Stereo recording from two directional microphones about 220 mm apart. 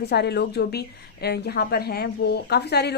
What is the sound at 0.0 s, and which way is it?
A woman's voice, 50° left (ahead or behind).